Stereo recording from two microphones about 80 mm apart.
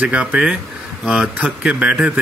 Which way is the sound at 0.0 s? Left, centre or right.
Centre.